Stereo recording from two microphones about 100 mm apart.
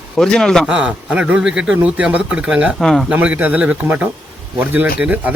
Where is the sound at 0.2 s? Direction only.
5° left (ahead or behind).